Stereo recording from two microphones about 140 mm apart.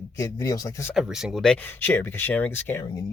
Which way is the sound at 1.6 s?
15° left (ahead or behind).